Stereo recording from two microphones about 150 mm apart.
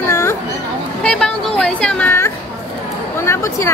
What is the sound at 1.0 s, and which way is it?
Speech, 5° left (ahead or behind).